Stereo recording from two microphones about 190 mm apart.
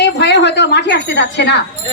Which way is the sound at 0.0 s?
65° left (ahead or behind).